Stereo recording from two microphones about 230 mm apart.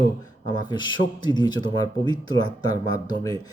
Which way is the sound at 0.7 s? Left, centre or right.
Centre.